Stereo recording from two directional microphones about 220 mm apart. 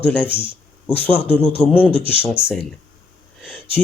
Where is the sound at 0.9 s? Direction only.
10° left (ahead or behind).